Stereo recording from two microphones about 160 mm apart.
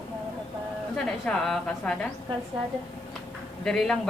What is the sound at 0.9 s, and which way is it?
Speech, 5° left (ahead or behind).